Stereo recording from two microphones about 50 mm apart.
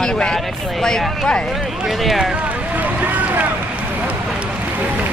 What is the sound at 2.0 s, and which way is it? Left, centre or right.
Speech, centre.